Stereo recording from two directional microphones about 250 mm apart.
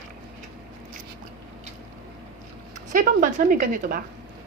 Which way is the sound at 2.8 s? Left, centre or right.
Right.